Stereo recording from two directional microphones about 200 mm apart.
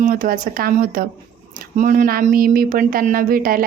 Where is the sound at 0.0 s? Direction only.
45° right (ahead or behind).